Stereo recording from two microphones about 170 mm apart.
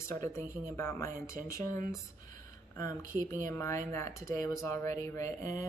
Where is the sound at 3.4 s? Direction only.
15° left (ahead or behind).